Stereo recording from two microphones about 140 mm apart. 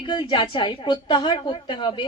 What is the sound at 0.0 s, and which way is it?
A woman's voice, 35° left (ahead or behind).